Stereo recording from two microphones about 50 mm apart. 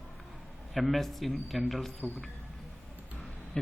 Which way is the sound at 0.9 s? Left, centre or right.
Centre.